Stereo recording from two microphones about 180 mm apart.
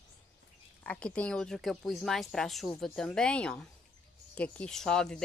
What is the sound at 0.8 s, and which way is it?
Speech, 5° left (ahead or behind).